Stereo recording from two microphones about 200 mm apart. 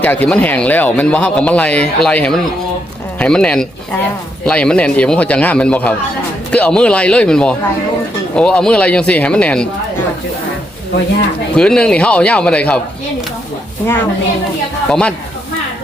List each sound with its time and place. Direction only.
0.0 s speech: 5° left (ahead or behind)
11.5 s speech: 5° left (ahead or behind)
14.8 s speech: 5° left (ahead or behind)